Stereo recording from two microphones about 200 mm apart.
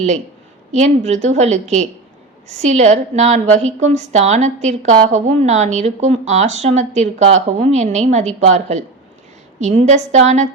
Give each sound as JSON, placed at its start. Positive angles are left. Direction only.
{"t": 0.7, "sound": "a woman's voice", "side_deg": -35}